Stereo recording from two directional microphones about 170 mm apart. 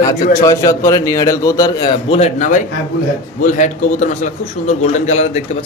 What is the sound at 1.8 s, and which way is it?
A man's voice, 35° left (ahead or behind).